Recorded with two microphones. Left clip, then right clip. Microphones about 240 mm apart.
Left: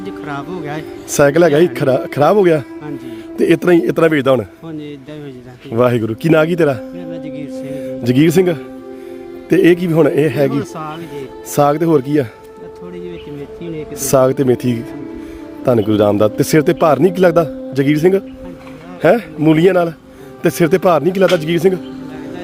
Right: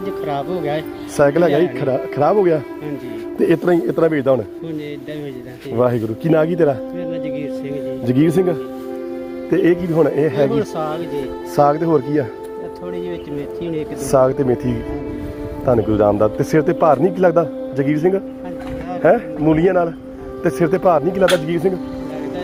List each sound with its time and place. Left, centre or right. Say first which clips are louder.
0.0 s speech: right 3 dB; left
1.2 s a man's voice: left 4 dB; left
3.3 s a man's voice: left 4 dB; left
5.7 s speech: left 3 dB; left
9.5 s a man's voice: left 5 dB; left
14.3 s a man's voice: left 3 dB; left
16.4 s a man's voice: left 3 dB; left